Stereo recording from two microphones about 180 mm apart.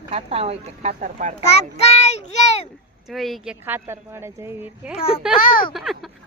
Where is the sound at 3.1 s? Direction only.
Centre (ahead or behind).